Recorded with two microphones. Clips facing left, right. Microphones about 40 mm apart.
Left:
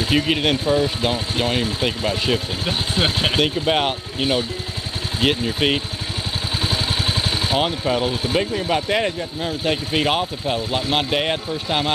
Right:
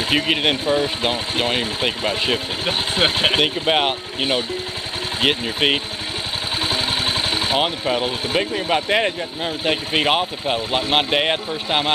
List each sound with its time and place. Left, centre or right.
0.1 s speech: centre
7.2 s speech: centre